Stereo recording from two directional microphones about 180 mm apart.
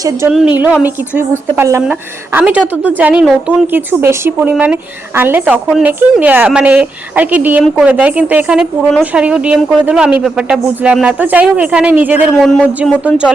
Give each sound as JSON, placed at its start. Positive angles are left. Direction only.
{"t": 0.3, "sound": "a woman's voice", "side_deg": -5}
{"t": 1.8, "sound": "a woman's voice", "side_deg": -5}